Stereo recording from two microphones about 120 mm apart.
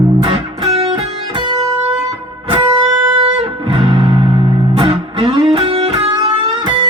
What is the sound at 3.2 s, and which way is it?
Music, 50° right (ahead or behind).